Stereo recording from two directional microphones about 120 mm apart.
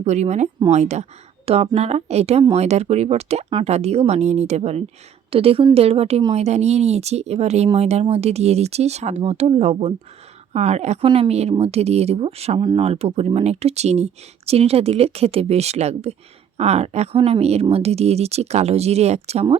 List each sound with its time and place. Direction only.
0.0 s speech: 70° right (ahead or behind)
1.5 s speech: 60° right (ahead or behind)
5.3 s a woman's voice: 55° right (ahead or behind)